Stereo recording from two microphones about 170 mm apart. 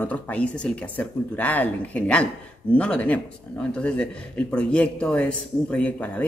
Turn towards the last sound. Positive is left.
turn(degrees=10)  # may be behind; listen again after turning